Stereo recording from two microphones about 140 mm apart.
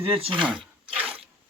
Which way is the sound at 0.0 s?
40° right (ahead or behind).